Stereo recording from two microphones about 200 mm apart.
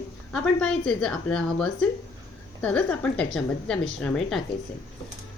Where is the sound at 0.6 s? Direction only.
5° left (ahead or behind).